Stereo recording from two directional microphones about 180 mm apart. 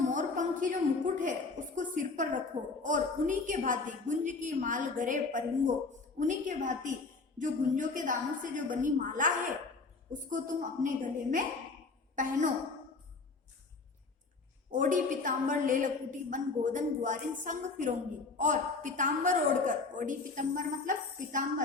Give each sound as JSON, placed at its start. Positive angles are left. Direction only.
{"t": 0.1, "sound": "a sound", "side_deg": -45}
{"t": 1.7, "sound": "a woman's voice", "side_deg": -45}
{"t": 14.7, "sound": "a woman's voice", "side_deg": -45}